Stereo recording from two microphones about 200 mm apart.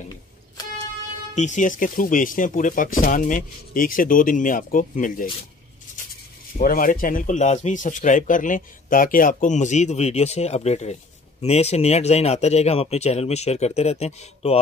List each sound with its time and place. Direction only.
1.3 s speech: 35° left (ahead or behind)
6.6 s speech: 45° left (ahead or behind)